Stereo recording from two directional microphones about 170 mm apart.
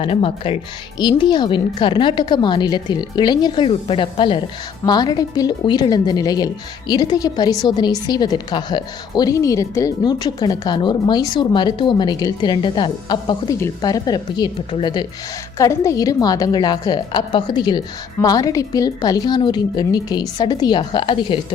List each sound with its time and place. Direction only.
0.0 s speech: 35° left (ahead or behind)
15.5 s speech: 20° left (ahead or behind)